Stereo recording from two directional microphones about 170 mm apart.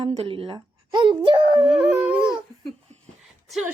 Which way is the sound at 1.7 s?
5° right (ahead or behind).